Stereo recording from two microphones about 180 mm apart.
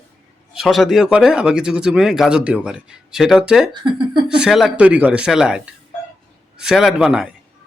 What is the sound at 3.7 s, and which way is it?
Speech, 25° right (ahead or behind).